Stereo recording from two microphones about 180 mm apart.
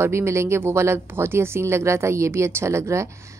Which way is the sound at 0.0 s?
15° right (ahead or behind).